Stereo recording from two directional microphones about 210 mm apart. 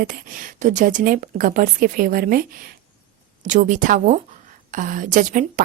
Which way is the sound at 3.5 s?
35° right (ahead or behind).